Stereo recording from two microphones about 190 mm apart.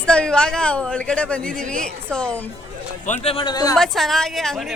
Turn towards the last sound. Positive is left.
turn(degrees=0)  # may be behind; listen again after turning